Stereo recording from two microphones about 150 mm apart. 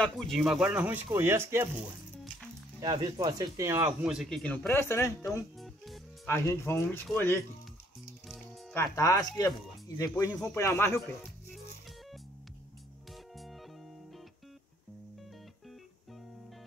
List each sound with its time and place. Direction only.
0.0 s speech: centre (ahead or behind); by 1.7 s 15° right (ahead or behind)
2.8 s speech: 25° right (ahead or behind)
4.0 s speech: 5° right (ahead or behind)
4.7 s speech: 20° left (ahead or behind)
6.2 s speech: 20° left (ahead or behind)
8.7 s speech: 20° left (ahead or behind)